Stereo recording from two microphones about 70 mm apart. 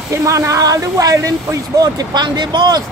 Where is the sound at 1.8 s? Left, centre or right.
Right.